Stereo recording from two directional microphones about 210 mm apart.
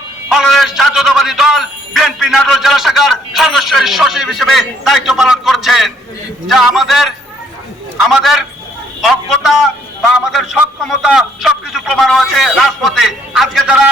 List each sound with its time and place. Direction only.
0.3 s a man's voice: centre (ahead or behind)
8.2 s a man's voice: centre (ahead or behind)